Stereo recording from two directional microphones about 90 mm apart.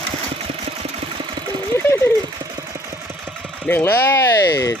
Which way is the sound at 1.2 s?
50° right (ahead or behind).